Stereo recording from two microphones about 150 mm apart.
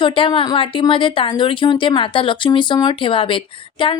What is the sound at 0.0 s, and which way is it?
A woman's voice, 35° left (ahead or behind).